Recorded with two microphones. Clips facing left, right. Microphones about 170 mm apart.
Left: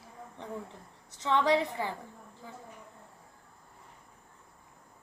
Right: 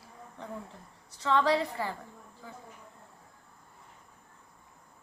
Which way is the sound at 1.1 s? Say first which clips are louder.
Even; 20° left (ahead or behind).